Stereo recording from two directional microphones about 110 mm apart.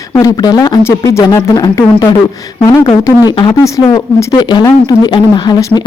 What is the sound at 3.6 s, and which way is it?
Speech, 25° left (ahead or behind).